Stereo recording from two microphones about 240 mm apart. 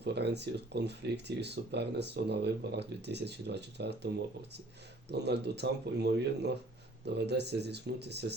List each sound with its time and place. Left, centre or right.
0.0 s speech: right
5.1 s speech: right